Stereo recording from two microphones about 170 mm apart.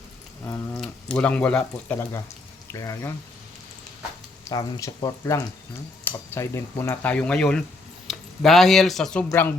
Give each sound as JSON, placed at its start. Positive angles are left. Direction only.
{"t": 0.4, "sound": "a sound", "side_deg": 15}
{"t": 0.8, "sound": "speech", "side_deg": 5}
{"t": 2.7, "sound": "speech", "side_deg": 20}
{"t": 4.4, "sound": "speech", "side_deg": 20}